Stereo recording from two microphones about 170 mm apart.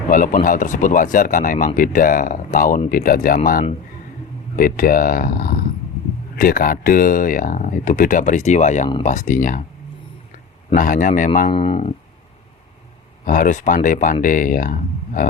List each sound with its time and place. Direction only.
0.1 s speech: 50° left (ahead or behind)
10.8 s speech: 50° left (ahead or behind)
11.5 s speech: 35° left (ahead or behind)
13.2 s speech: 50° left (ahead or behind)